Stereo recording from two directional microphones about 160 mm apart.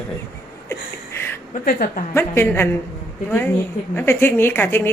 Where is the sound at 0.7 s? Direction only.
15° left (ahead or behind).